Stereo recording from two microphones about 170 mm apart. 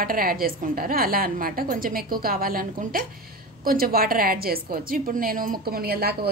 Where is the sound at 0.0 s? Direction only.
55° right (ahead or behind).